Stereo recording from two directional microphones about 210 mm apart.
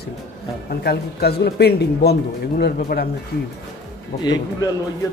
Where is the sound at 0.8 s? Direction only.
50° left (ahead or behind).